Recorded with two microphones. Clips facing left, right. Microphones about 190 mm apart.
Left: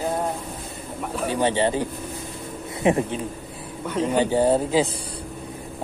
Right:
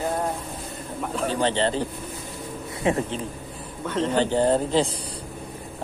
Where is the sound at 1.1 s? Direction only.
10° left (ahead or behind).